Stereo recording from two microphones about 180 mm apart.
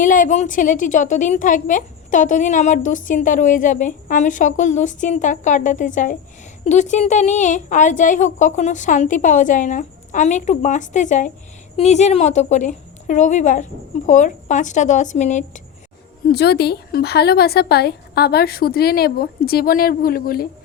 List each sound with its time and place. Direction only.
0.0 s a woman's voice: 45° left (ahead or behind)
16.3 s speech: 65° left (ahead or behind)